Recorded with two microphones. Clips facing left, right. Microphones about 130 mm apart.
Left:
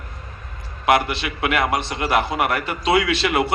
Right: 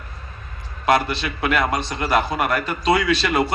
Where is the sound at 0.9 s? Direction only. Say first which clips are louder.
Even; 20° left (ahead or behind).